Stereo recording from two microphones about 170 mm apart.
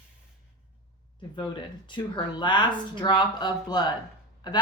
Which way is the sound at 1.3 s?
30° left (ahead or behind).